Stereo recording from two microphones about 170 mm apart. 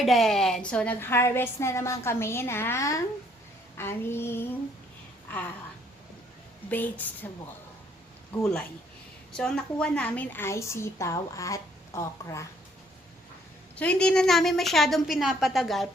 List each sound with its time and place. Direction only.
0.0 s a woman's voice: centre (ahead or behind)
6.7 s a woman's voice: 10° left (ahead or behind)
9.3 s a woman's voice: 5° left (ahead or behind)
13.7 s a woman's voice: 5° left (ahead or behind)